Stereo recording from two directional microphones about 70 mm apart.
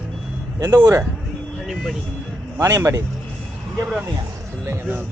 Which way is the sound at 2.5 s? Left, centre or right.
Right.